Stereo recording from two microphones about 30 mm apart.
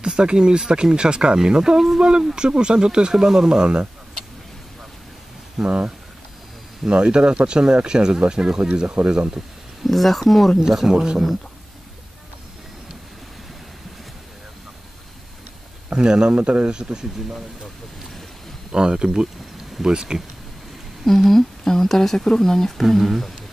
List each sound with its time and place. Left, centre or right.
0.0 s speech: right
3.6 s speech: right
5.6 s speech: right
6.9 s speech: right
9.8 s speech: centre
10.6 s speech: centre
15.9 s speech: right
18.7 s speech: right
21.0 s speech: centre
22.8 s speech: centre